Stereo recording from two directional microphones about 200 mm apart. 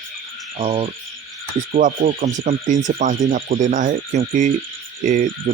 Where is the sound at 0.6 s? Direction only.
30° right (ahead or behind).